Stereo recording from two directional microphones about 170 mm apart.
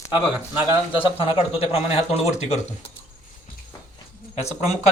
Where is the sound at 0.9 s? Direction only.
30° left (ahead or behind).